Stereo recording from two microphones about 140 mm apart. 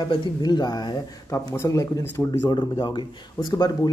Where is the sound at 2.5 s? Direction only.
30° left (ahead or behind).